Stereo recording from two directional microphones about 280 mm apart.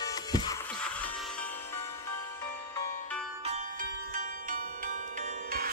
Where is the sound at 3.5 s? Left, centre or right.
Right.